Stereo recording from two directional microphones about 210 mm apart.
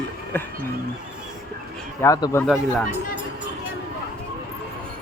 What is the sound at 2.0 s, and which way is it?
Speech, 15° left (ahead or behind).